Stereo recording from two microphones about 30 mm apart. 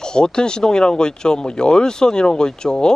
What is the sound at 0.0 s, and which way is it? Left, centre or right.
Speech, left.